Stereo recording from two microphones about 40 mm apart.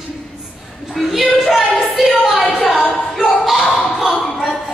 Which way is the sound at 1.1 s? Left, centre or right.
Centre.